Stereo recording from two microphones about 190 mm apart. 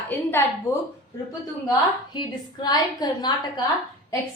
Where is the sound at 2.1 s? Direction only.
25° left (ahead or behind).